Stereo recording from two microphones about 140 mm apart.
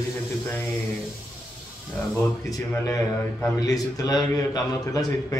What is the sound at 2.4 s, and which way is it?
A man's voice, 25° left (ahead or behind).